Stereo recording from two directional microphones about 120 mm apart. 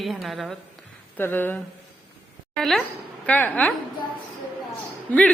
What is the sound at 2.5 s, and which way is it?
A woman's voice, centre (ahead or behind).